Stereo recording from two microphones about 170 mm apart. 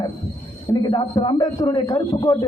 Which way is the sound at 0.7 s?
25° left (ahead or behind).